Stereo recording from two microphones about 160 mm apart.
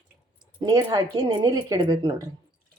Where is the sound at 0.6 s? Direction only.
25° right (ahead or behind).